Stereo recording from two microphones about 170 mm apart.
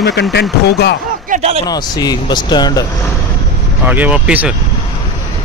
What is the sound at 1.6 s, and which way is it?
Speech, 25° left (ahead or behind).